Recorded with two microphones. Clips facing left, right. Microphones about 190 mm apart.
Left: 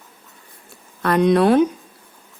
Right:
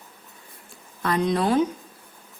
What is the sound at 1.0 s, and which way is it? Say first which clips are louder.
Speech: left 7 dB; 65° left (ahead or behind).